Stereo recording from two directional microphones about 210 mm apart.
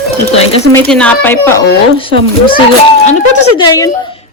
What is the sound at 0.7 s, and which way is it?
Speech, 5° left (ahead or behind).